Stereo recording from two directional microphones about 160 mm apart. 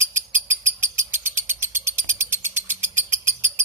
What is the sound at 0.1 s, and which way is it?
Bird, 15° right (ahead or behind).